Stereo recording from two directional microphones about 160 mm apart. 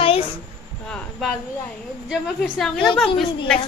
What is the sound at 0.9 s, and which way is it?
A woman's voice, centre (ahead or behind).